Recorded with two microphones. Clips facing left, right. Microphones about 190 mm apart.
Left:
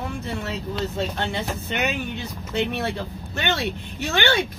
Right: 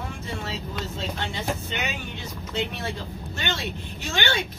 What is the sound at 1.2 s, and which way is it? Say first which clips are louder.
Speech: left 2 dB; 60° left (ahead or behind).